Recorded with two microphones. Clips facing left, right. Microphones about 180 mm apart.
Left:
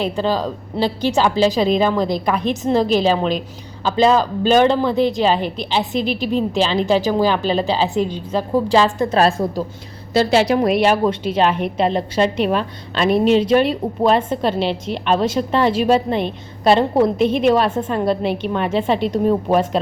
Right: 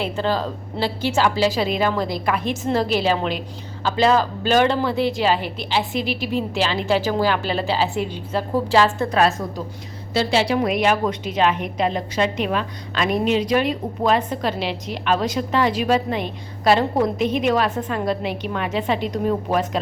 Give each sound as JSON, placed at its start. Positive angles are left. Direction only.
{"t": 0.0, "sound": "a woman's voice", "side_deg": 15}
{"t": 3.8, "sound": "a woman's voice", "side_deg": 20}
{"t": 10.2, "sound": "a woman's voice", "side_deg": 45}